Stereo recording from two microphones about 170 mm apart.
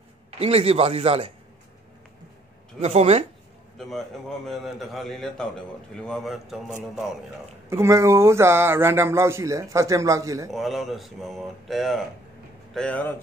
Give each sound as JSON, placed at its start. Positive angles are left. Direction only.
{"t": 0.4, "sound": "speech", "side_deg": -35}
{"t": 2.8, "sound": "speech", "side_deg": -40}
{"t": 3.7, "sound": "a man's voice", "side_deg": 0}
{"t": 7.7, "sound": "speech", "side_deg": -15}
{"t": 10.5, "sound": "a man's voice", "side_deg": 0}